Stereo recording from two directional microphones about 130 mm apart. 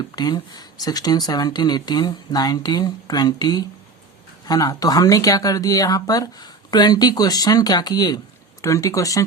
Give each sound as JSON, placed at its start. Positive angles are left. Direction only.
{"t": 0.2, "sound": "speech", "side_deg": 30}